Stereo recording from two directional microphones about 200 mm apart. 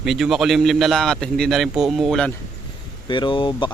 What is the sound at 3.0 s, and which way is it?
Speech, 25° left (ahead or behind).